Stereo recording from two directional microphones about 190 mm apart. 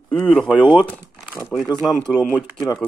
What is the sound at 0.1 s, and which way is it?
Speech, 5° left (ahead or behind).